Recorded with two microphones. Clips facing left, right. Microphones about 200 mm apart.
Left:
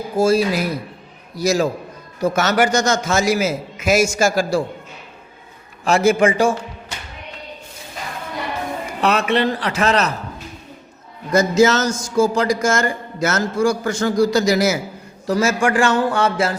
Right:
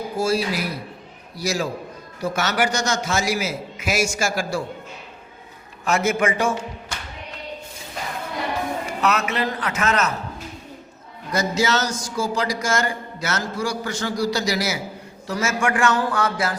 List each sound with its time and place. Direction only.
0.2 s a man's voice: 45° left (ahead or behind)
5.8 s a man's voice: 30° left (ahead or behind)
9.0 s a man's voice: 30° left (ahead or behind)
11.3 s speech: 45° left (ahead or behind)
15.3 s speech: 35° left (ahead or behind)